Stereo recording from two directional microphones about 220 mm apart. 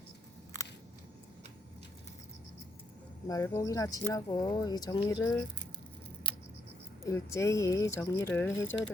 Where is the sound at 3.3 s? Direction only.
15° left (ahead or behind).